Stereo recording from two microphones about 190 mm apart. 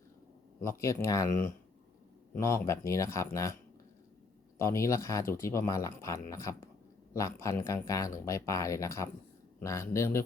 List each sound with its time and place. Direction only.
0.6 s speech: 15° left (ahead or behind)
2.3 s speech: 15° left (ahead or behind)
4.5 s speech: 15° left (ahead or behind)